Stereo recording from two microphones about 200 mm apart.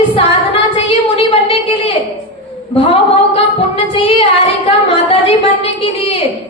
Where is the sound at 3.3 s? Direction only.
25° left (ahead or behind).